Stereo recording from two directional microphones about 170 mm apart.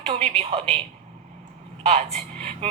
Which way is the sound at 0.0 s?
35° right (ahead or behind).